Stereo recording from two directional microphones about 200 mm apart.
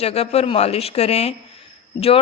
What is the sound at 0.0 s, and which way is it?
A woman's voice, 30° left (ahead or behind).